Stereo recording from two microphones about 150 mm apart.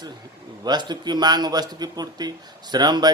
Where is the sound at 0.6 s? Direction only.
30° right (ahead or behind).